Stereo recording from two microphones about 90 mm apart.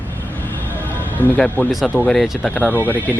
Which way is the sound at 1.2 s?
20° left (ahead or behind).